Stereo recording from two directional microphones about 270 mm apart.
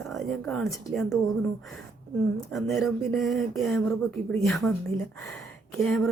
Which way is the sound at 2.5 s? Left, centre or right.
Centre.